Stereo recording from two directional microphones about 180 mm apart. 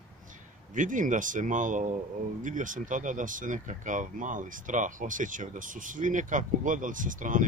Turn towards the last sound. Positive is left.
turn(degrees=-45)  # may be behind; listen again after turning